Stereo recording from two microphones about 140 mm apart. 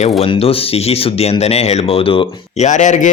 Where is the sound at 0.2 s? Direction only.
45° left (ahead or behind).